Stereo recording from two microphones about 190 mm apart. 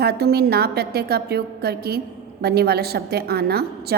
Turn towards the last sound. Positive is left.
turn(degrees=-55)  # may be behind; listen again after turning